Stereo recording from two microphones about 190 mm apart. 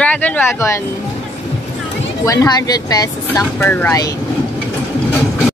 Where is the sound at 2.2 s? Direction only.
20° left (ahead or behind).